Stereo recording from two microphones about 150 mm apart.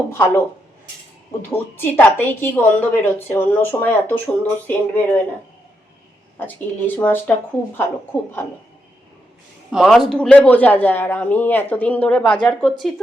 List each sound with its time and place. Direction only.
0.1 s a woman's voice: 15° left (ahead or behind)
1.5 s a woman's voice: 15° left (ahead or behind)
6.4 s a woman's voice: 10° left (ahead or behind)
9.6 s a woman's voice: centre (ahead or behind)